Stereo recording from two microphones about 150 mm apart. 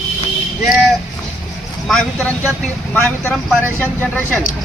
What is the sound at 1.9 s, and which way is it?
Speech, centre (ahead or behind).